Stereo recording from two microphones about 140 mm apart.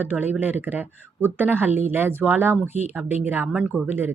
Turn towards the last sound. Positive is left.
turn(degrees=-15)  # may be behind; listen again after turning